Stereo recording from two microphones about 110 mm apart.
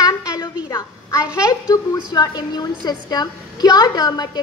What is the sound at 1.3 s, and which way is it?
A woman's voice, 30° left (ahead or behind).